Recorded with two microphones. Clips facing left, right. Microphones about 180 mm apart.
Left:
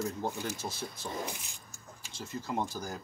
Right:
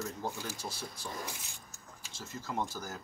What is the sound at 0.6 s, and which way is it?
Speech, 20° left (ahead or behind).